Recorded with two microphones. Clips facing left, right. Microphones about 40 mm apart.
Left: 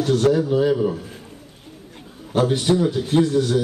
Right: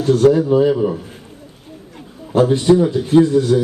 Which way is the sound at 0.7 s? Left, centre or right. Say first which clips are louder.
Right 3 dB; centre.